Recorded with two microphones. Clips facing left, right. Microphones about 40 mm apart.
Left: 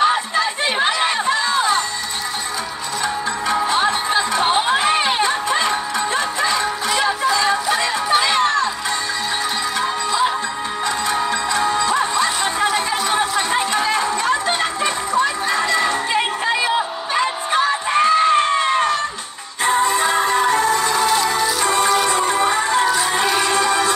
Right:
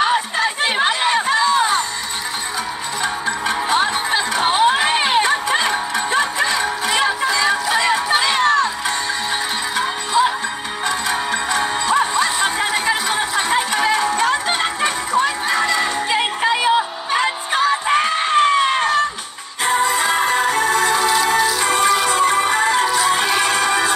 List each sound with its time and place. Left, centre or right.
0.8 s a sound: right
4.5 s crowd: right
5.0 s chatter: right
5.6 s music: right
11.1 s music: right
13.4 s a sound: right
14.0 s music: right
17.1 s music: right
20.0 s music: right